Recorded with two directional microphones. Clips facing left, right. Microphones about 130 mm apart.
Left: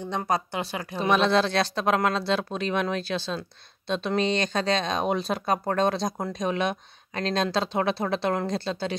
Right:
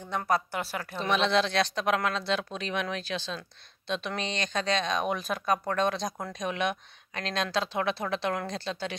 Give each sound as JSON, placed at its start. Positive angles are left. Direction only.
{"t": 0.1, "sound": "speech", "side_deg": 20}
{"t": 1.1, "sound": "speech", "side_deg": 40}